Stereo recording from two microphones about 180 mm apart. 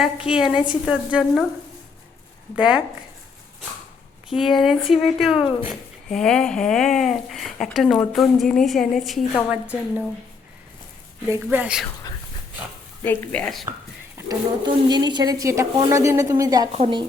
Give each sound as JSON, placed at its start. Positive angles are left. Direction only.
{"t": 0.0, "sound": "speech", "side_deg": -5}
{"t": 2.6, "sound": "speech", "side_deg": -5}
{"t": 4.3, "sound": "speech", "side_deg": 0}
{"t": 11.4, "sound": "speech", "side_deg": -5}
{"t": 13.1, "sound": "speech", "side_deg": 5}
{"t": 14.2, "sound": "a woman's voice", "side_deg": -20}
{"t": 16.7, "sound": "a woman's voice", "side_deg": -30}